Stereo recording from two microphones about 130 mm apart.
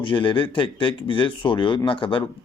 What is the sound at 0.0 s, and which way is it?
Speech, 40° left (ahead or behind).